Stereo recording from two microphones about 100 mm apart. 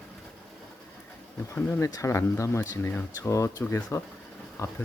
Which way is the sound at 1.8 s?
35° left (ahead or behind).